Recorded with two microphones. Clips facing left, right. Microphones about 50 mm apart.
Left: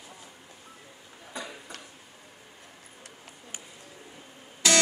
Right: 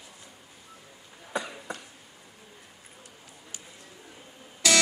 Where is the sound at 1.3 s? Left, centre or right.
Right.